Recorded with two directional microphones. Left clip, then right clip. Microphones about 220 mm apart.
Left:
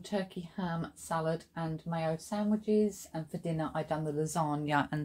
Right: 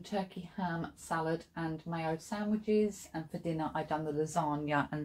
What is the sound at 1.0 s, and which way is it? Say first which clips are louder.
Speech: left 1 dB; 45° left (ahead or behind).